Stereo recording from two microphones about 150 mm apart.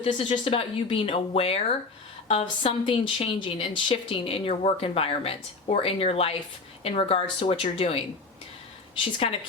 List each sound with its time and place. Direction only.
0.0 s a woman's voice: 35° left (ahead or behind)
9.1 s a woman's voice: 40° left (ahead or behind)